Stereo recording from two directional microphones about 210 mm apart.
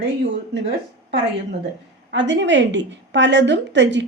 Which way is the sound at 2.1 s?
55° right (ahead or behind).